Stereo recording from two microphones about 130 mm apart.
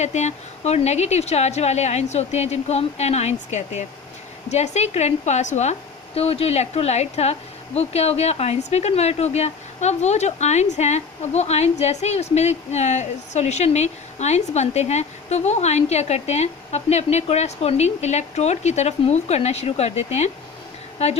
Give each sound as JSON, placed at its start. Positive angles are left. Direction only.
{"t": 0.0, "sound": "speech", "side_deg": 60}
{"t": 6.1, "sound": "speech", "side_deg": 50}